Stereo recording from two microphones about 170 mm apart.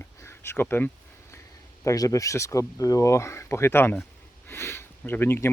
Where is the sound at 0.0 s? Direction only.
15° left (ahead or behind).